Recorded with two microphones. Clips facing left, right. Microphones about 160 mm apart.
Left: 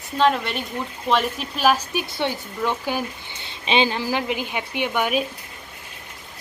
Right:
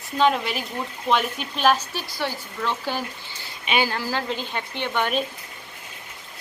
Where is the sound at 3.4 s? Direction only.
25° left (ahead or behind).